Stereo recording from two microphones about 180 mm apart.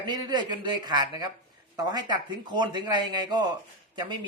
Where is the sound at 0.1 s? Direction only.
25° right (ahead or behind).